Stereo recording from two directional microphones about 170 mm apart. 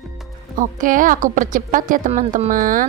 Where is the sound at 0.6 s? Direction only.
55° right (ahead or behind).